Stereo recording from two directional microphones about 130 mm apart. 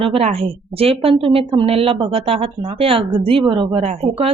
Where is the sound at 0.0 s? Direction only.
50° right (ahead or behind).